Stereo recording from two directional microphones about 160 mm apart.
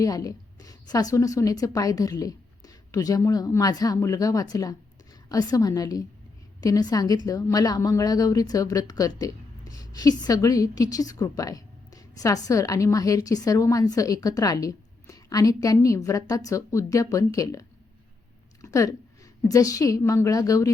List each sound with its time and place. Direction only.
0.0 s a woman's voice: 20° left (ahead or behind)